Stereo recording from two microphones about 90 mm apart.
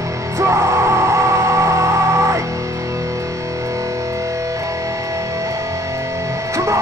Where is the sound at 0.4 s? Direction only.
35° right (ahead or behind).